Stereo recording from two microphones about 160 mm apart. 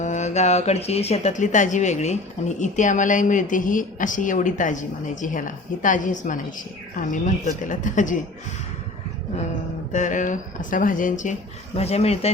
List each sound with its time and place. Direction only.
0.0 s a woman's voice: 45° left (ahead or behind)
9.9 s a woman's voice: 50° left (ahead or behind)
11.8 s speech: 40° left (ahead or behind)